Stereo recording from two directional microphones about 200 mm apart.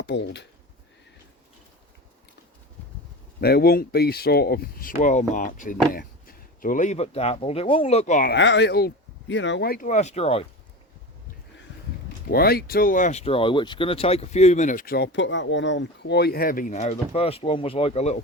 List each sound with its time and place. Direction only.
0.0 s speech: 60° left (ahead or behind)
3.4 s speech: 50° left (ahead or behind)
8.3 s speech: 60° left (ahead or behind); by 10.4 s 30° left (ahead or behind)
12.3 s speech: 50° left (ahead or behind); by 18.2 s 35° left (ahead or behind)